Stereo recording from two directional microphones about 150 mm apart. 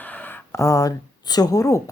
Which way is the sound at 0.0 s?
10° left (ahead or behind).